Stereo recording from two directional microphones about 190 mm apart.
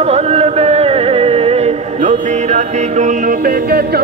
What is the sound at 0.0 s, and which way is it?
Music, 35° right (ahead or behind).